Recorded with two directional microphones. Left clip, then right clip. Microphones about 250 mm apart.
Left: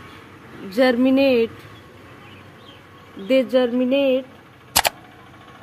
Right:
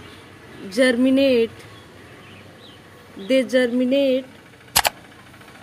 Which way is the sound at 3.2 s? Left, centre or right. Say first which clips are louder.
Left 1 dB; centre.